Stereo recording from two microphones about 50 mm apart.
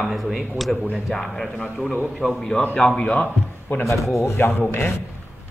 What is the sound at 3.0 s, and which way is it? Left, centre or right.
Speech, left.